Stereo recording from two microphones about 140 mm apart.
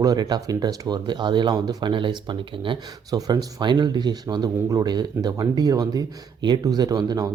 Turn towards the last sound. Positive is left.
turn(degrees=-30)  # may be behind; listen again after turning